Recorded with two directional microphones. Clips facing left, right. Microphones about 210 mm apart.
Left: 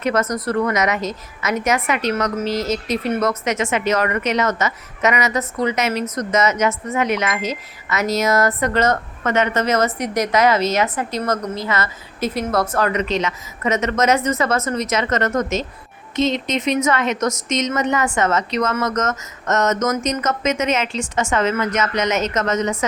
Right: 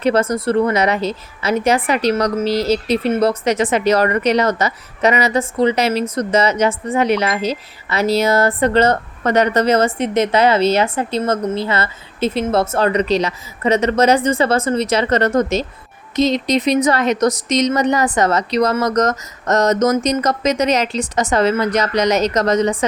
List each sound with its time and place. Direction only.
0.0 s a woman's voice: 30° right (ahead or behind)